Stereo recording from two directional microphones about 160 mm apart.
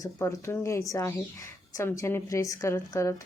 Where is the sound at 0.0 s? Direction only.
20° left (ahead or behind).